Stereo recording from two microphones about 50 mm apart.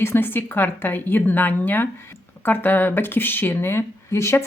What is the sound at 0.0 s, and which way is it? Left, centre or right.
A woman's voice, left.